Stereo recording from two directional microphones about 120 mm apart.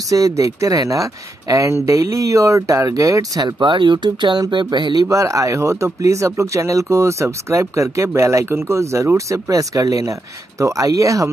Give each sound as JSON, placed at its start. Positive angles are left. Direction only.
{"t": 0.1, "sound": "speech", "side_deg": -30}
{"t": 5.1, "sound": "speech", "side_deg": -25}